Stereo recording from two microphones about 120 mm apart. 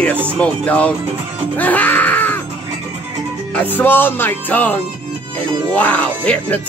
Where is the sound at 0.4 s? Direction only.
10° left (ahead or behind).